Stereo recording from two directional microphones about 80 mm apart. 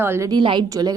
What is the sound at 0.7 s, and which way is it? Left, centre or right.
Speech, right.